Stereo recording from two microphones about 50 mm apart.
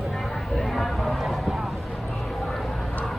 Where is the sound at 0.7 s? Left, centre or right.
Centre.